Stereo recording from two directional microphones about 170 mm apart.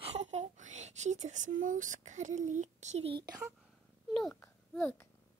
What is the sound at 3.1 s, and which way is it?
Speech, 25° right (ahead or behind).